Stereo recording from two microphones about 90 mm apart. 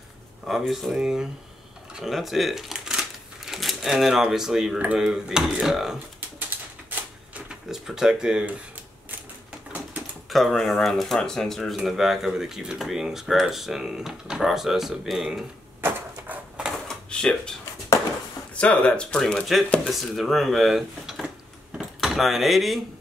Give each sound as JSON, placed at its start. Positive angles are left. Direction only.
{"t": 0.5, "sound": "speech", "side_deg": 0}
{"t": 6.9, "sound": "typewriter", "side_deg": -15}
{"t": 7.6, "sound": "speech", "side_deg": -5}
{"t": 10.3, "sound": "speech", "side_deg": 0}
{"t": 16.8, "sound": "drawer open or close", "side_deg": 10}
{"t": 18.5, "sound": "speech", "side_deg": 15}
{"t": 21.7, "sound": "door", "side_deg": 0}